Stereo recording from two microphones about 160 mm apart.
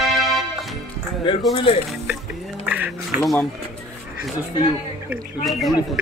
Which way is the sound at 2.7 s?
10° right (ahead or behind).